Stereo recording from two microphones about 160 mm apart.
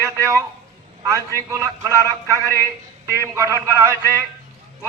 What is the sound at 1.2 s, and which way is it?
Speech, 20° left (ahead or behind).